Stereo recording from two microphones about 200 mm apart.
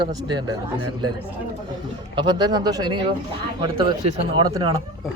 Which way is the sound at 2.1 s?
20° right (ahead or behind).